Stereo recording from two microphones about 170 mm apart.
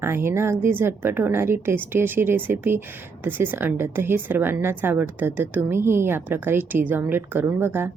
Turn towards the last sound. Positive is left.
turn(degrees=-10)  # may be behind; listen again after turning